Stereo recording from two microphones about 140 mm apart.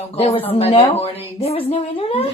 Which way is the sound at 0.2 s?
45° left (ahead or behind).